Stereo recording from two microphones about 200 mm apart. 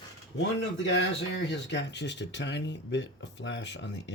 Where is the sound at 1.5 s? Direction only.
65° left (ahead or behind).